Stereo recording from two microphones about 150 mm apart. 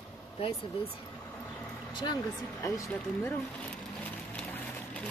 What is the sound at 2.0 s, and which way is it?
Speech, 25° left (ahead or behind).